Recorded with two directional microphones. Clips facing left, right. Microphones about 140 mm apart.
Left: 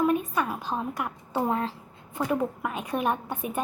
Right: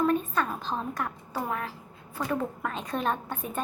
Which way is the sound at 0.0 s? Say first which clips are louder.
Left 1 dB; 10° left (ahead or behind).